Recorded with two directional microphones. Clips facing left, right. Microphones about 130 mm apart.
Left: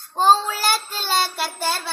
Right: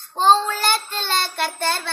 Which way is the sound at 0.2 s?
5° left (ahead or behind).